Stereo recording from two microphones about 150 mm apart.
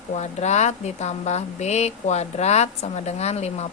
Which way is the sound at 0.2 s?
50° left (ahead or behind).